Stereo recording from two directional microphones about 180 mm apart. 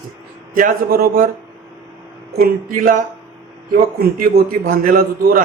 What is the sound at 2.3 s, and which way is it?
A man's voice, 55° right (ahead or behind).